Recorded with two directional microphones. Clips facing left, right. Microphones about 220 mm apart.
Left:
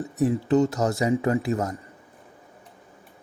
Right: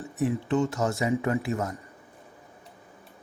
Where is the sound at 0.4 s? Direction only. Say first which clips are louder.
Left 5 dB; 40° left (ahead or behind).